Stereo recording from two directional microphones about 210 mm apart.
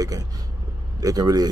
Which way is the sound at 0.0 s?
15° right (ahead or behind).